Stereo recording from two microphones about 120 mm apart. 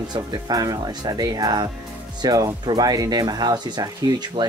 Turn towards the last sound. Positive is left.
turn(degrees=-35)  # may be behind; listen again after turning